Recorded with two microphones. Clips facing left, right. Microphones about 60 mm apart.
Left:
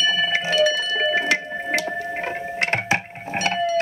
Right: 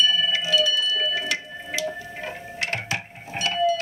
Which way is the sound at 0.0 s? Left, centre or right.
Left.